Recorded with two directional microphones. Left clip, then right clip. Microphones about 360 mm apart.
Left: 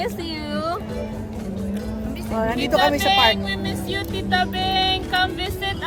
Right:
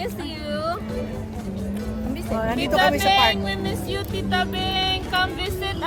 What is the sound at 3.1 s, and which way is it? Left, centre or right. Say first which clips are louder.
Speech: left 1 dB; centre.